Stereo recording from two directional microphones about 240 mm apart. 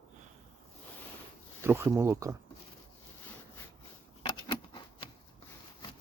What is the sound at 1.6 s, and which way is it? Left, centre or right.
Speech, centre.